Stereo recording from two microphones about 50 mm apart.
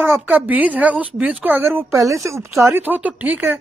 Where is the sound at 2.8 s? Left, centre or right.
Right.